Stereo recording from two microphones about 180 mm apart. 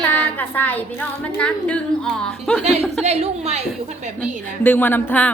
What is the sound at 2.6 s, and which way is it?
A woman's voice, 35° right (ahead or behind).